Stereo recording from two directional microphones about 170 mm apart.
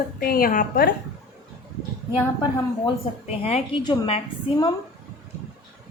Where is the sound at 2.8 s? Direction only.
35° left (ahead or behind).